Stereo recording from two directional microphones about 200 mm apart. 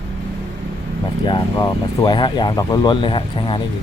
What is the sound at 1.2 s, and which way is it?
Speech, 20° left (ahead or behind).